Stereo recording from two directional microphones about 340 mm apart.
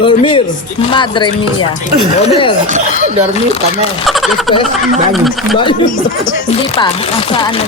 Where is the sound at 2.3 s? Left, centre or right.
Centre.